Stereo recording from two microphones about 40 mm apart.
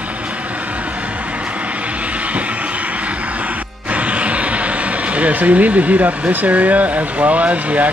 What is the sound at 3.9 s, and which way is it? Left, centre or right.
Music, right.